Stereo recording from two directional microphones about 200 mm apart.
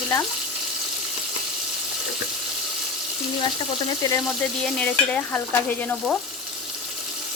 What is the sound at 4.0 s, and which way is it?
Speech, 20° left (ahead or behind).